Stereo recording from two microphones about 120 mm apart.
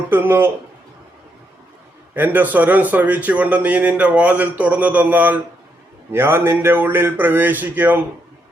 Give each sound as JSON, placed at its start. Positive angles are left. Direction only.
{"t": 0.1, "sound": "a man's voice", "side_deg": -20}
{"t": 2.1, "sound": "a man's voice", "side_deg": -15}